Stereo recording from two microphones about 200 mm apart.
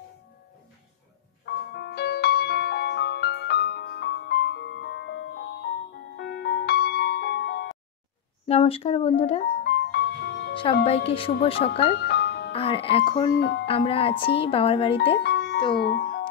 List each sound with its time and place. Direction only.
1.4 s music: 55° left (ahead or behind)
8.5 s speech: 30° left (ahead or behind)
9.6 s music: 55° left (ahead or behind)
10.5 s music: 25° left (ahead or behind)
10.9 s speech: 30° left (ahead or behind)
12.1 s music: 55° left (ahead or behind)
12.5 s speech: 30° left (ahead or behind)
13.3 s speech: 70° left (ahead or behind)
13.7 s speech: 30° left (ahead or behind)
15.2 s music: 55° left (ahead or behind)